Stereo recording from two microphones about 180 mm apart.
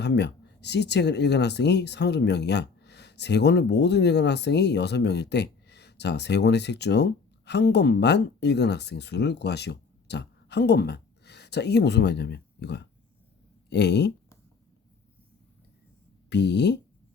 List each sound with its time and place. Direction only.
0.0 s speech: 70° left (ahead or behind)
16.3 s speech: 70° left (ahead or behind)